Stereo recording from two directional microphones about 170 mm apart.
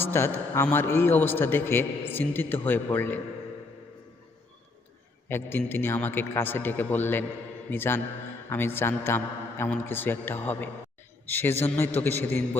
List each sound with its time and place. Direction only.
0.0 s a man's voice: 15° left (ahead or behind)
5.3 s a man's voice: 15° left (ahead or behind)